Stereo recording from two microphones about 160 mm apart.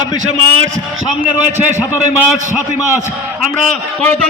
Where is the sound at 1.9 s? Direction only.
5° right (ahead or behind).